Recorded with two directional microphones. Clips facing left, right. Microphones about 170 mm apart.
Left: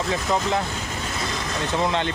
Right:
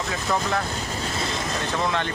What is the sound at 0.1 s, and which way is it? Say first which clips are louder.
Speech: left 2 dB; 20° left (ahead or behind).